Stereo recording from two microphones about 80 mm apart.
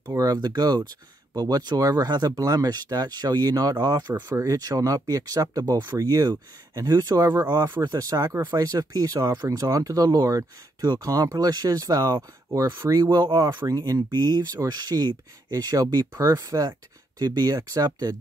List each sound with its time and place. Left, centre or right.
0.0 s a sound: right
0.3 s speech: right
4.1 s speech: right
4.6 s speech: right
13.7 s speech: right